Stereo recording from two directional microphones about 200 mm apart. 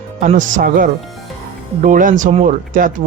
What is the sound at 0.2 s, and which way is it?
Speech, 40° right (ahead or behind).